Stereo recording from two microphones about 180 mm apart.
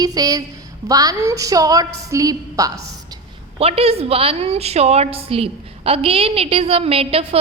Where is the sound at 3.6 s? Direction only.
35° right (ahead or behind).